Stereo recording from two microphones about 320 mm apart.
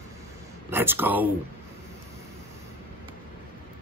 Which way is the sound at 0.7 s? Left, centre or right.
Centre.